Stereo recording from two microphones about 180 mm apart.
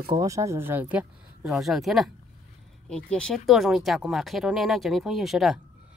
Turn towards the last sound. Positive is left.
turn(degrees=0)  # may be behind; listen again after turning